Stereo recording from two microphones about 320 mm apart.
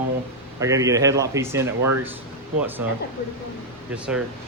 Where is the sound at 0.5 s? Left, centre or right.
Centre.